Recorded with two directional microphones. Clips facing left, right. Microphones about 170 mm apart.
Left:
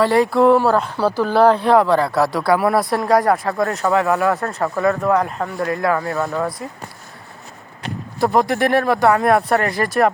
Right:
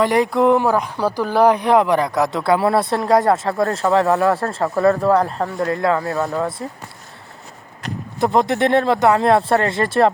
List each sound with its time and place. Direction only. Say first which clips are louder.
0.0 s speech: left 1 dB; 20° right (ahead or behind)
6.6 s speech: right 2 dB; 35° right (ahead or behind)
8.2 s speech: even; 20° right (ahead or behind)